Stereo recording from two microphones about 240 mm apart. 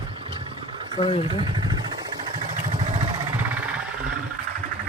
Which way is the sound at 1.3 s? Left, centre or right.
Centre.